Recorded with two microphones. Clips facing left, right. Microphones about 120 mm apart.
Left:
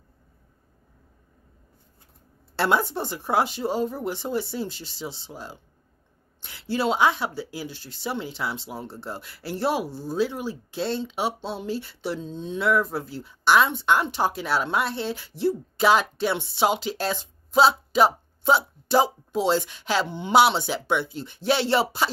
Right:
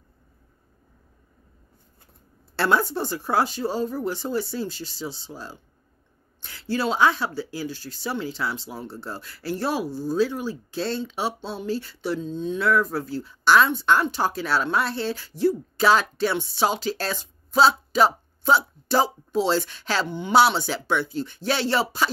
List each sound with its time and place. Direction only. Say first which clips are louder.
2.5 s speech: right 1 dB; 20° left (ahead or behind)